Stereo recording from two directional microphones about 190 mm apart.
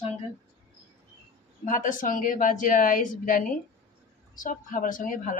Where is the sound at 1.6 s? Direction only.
45° left (ahead or behind).